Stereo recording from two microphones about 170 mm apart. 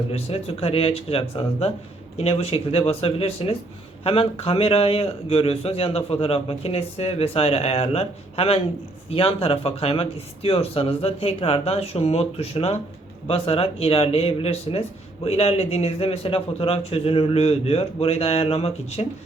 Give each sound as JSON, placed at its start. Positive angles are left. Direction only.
{"t": 0.1, "sound": "speech", "side_deg": 35}